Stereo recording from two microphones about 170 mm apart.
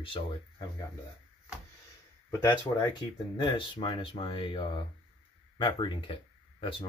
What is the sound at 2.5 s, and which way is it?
Speech, 25° left (ahead or behind).